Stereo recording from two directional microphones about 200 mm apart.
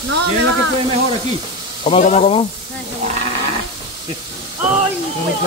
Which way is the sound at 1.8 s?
35° left (ahead or behind).